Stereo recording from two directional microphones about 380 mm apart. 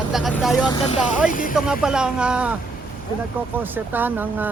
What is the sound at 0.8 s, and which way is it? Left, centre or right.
Speech, centre.